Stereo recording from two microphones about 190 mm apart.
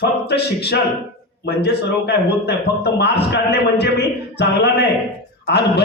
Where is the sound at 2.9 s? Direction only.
60° left (ahead or behind).